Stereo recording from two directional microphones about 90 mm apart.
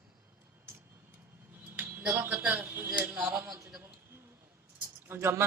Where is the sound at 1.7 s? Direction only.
25° right (ahead or behind).